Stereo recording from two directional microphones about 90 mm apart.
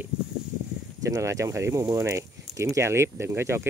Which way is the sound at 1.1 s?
35° right (ahead or behind).